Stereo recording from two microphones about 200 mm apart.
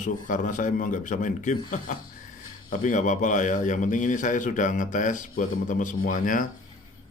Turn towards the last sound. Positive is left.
turn(degrees=40)  # may be behind; listen again after turning